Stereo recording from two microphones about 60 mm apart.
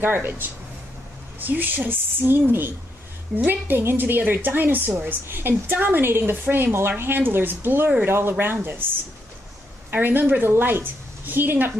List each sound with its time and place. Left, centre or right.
0.0 s a woman's voice: right
9.8 s a woman's voice: right